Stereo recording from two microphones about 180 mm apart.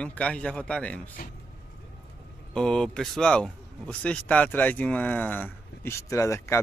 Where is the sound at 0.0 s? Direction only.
5° left (ahead or behind).